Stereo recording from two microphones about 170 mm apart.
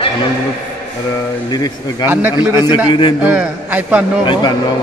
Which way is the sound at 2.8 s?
30° left (ahead or behind).